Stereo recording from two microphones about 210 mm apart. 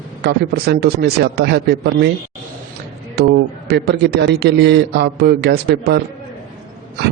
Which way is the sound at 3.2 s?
50° right (ahead or behind).